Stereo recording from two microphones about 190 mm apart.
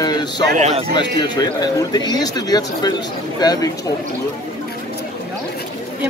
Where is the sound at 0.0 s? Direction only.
20° left (ahead or behind).